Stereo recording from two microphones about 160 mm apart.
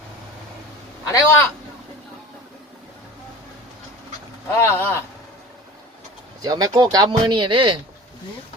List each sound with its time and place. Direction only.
1.0 s a man's voice: 20° left (ahead or behind)
4.6 s speech: 15° left (ahead or behind)
6.4 s speech: 25° right (ahead or behind)